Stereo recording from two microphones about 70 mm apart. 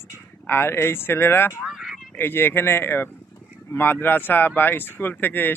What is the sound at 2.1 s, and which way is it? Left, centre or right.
Speech, left.